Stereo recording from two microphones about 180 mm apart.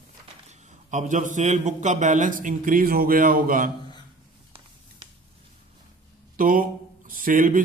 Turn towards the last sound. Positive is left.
turn(degrees=-50)  # may be behind; listen again after turning